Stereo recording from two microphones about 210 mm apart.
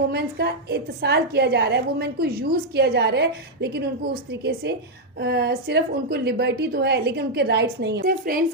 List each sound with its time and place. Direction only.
0.1 s a woman's voice: 50° right (ahead or behind)